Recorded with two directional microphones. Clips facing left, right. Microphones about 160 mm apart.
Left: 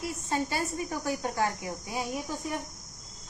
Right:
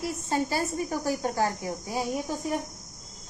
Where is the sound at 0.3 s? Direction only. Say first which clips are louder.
Right 3 dB; 35° right (ahead or behind).